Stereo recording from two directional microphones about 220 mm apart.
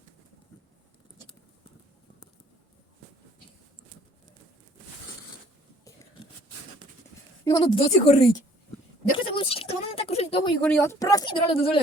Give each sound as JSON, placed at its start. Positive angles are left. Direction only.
{"t": 7.4, "sound": "speech", "side_deg": 20}
{"t": 9.1, "sound": "a sound", "side_deg": 25}
{"t": 10.6, "sound": "speech", "side_deg": 5}